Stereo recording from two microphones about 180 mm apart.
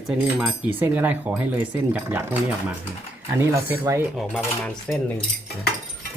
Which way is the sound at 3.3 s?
15° right (ahead or behind).